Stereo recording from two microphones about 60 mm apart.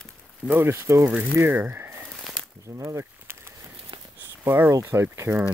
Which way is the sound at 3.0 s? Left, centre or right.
Right.